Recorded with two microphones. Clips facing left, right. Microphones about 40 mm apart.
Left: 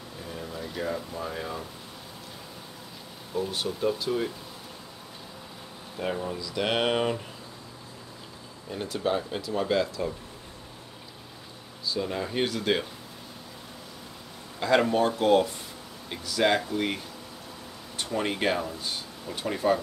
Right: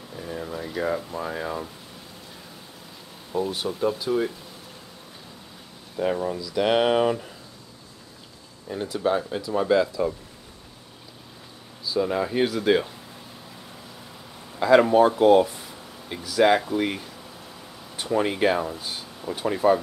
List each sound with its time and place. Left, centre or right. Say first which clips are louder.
0.2 s a sound: right 5 dB; centre
0.8 s speech: right 5 dB; centre
3.3 s speech: right 4 dB; centre
5.9 s speech: right 6 dB; centre
8.8 s speech: right 4 dB; centre
11.8 s a sound: right 6 dB; centre
12.1 s speech: right 6 dB; centre
12.4 s speech: right 5 dB; centre
14.6 s speech: right 7 dB; centre
18.6 s speech: right 3 dB; centre